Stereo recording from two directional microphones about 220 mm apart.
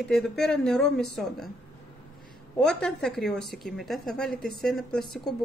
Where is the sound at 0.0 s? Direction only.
Centre (ahead or behind).